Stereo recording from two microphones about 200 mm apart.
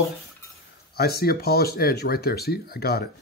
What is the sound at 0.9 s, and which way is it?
Speech, 50° left (ahead or behind).